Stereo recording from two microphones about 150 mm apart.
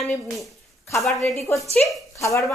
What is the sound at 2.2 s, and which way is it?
Speech, 20° left (ahead or behind).